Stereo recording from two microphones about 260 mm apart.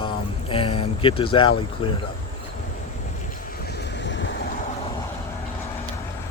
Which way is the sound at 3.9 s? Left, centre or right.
Left.